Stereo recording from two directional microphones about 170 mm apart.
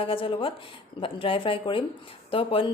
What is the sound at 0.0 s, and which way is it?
A woman's voice, 30° left (ahead or behind).